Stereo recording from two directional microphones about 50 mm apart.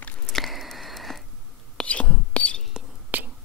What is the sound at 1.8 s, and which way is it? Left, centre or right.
Whispering, left.